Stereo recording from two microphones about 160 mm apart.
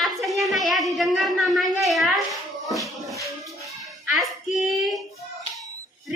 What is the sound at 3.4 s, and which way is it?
Child singing, centre (ahead or behind).